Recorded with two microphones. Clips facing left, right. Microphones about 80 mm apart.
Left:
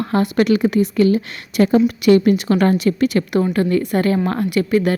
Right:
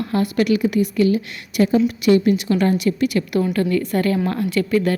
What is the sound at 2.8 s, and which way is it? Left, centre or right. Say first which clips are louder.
Speech: left 3 dB; left.